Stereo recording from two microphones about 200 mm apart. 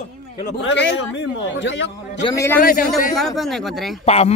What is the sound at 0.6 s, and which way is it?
A man's voice, 60° left (ahead or behind).